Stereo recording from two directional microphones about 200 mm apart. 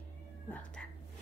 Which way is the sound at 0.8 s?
5° left (ahead or behind).